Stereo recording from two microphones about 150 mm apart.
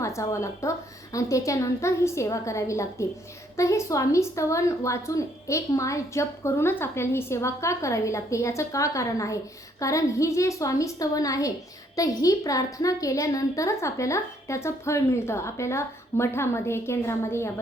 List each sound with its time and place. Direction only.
0.0 s speech: 20° left (ahead or behind)